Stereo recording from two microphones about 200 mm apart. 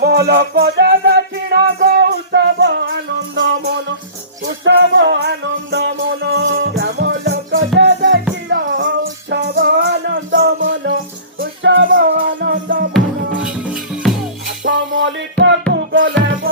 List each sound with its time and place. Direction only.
0.0 s music: 50° right (ahead or behind); by 8.1 s 70° right (ahead or behind)
9.3 s music: 55° right (ahead or behind)
12.9 s music: 5° right (ahead or behind)
14.6 s music: 65° right (ahead or behind)